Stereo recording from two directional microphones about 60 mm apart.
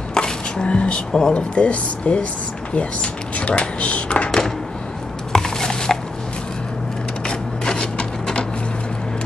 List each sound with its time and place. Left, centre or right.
0.1 s speech: centre
5.3 s biting: centre
7.2 s rub: centre